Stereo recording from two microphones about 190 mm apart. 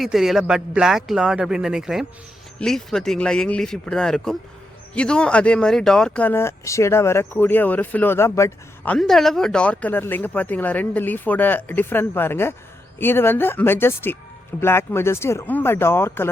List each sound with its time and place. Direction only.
0.0 s speech: centre (ahead or behind)